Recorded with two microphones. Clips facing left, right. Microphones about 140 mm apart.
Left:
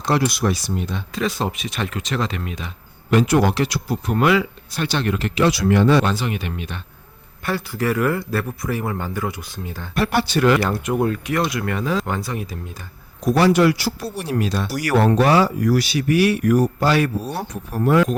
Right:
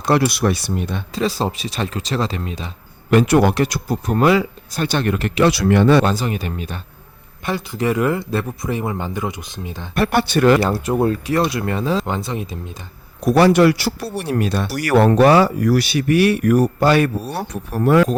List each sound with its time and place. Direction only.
0.0 s speech: 60° right (ahead or behind)
1.1 s speech: 30° right (ahead or behind)
3.1 s speech: 55° right (ahead or behind)
6.1 s speech: 40° right (ahead or behind)
7.4 s speech: 20° right (ahead or behind)
9.9 s speech: 55° right (ahead or behind)
10.6 s speech: 35° right (ahead or behind)
13.2 s speech: 60° right (ahead or behind)
17.3 s speech: 70° right (ahead or behind)